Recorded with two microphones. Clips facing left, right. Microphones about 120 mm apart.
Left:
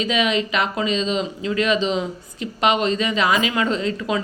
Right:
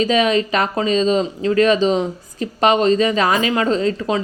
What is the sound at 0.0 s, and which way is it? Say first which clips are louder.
A woman's voice: right 5 dB; 40° right (ahead or behind).